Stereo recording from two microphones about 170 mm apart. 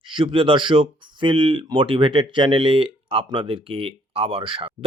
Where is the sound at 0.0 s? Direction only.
30° right (ahead or behind).